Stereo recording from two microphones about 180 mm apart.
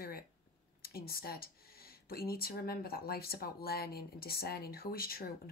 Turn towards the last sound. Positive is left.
turn(degrees=55)  # may be behind; listen again after turning